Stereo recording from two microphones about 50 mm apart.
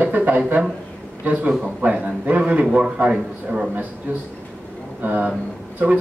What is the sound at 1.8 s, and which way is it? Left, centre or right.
Speech, right.